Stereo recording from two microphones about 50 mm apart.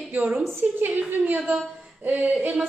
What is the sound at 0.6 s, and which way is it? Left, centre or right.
A woman's voice, right.